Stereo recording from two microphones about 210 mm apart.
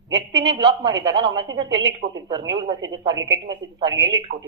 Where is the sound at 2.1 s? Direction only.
20° right (ahead or behind).